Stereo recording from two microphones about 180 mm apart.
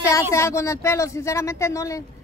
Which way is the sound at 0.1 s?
15° left (ahead or behind).